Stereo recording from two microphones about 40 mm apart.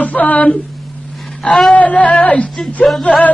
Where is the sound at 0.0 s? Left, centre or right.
Left.